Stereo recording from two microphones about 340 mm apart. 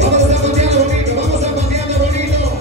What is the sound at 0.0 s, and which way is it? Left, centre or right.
Music, centre.